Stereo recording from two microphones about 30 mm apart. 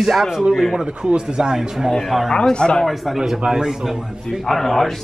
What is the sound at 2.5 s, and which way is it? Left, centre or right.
Speech, left.